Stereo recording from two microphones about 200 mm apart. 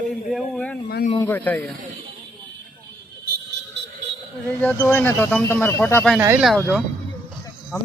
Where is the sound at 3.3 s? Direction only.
60° right (ahead or behind).